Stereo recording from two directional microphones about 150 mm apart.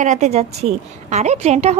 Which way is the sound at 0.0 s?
55° right (ahead or behind).